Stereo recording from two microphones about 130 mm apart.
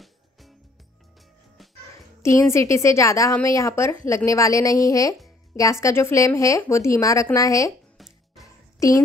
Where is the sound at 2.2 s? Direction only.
20° left (ahead or behind).